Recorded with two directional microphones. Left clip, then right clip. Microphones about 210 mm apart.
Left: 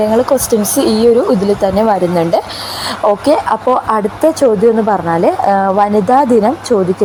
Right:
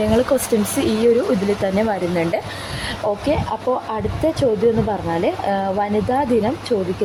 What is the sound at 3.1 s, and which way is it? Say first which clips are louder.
Speech: left 10 dB; 15° left (ahead or behind).